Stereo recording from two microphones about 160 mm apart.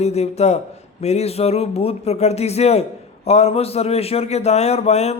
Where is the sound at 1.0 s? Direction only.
40° left (ahead or behind).